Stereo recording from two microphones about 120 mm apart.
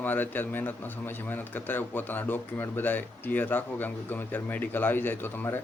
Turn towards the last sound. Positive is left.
turn(degrees=15)  # may be behind; listen again after turning